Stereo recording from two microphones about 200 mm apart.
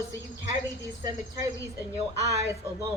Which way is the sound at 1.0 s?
20° right (ahead or behind).